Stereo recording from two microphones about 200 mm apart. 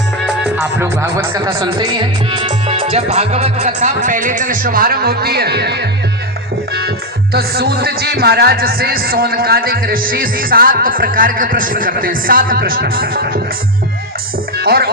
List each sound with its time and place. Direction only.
0.3 s speech: 5° right (ahead or behind); by 5.9 s 55° right (ahead or behind)
7.3 s speech: 50° right (ahead or behind)
14.5 s music: 50° right (ahead or behind)